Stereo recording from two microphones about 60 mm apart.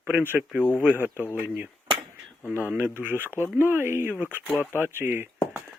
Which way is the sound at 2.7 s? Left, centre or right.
Right.